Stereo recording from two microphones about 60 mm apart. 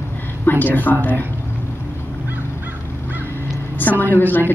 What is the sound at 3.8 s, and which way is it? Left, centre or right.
Speech, left.